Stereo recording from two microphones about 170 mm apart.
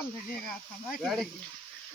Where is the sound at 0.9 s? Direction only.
Centre (ahead or behind).